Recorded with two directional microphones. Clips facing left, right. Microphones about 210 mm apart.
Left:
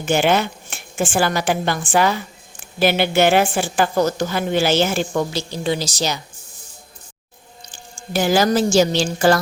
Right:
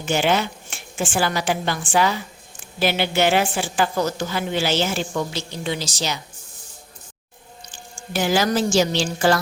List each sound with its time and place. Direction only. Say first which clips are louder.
0.0 s a woman's voice: left 3 dB; 50° left (ahead or behind)
5.3 s a woman's voice: left 5 dB; 35° left (ahead or behind)
8.1 s a woman's voice: left 3 dB; 40° left (ahead or behind)